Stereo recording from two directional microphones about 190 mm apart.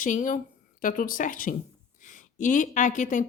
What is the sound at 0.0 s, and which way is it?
A woman's voice, 40° left (ahead or behind).